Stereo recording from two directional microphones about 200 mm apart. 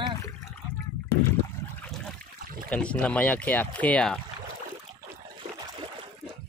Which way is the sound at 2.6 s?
5° left (ahead or behind).